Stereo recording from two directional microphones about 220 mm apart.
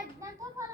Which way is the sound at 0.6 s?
15° right (ahead or behind).